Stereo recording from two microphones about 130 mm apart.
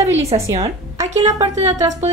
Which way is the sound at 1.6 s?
55° right (ahead or behind).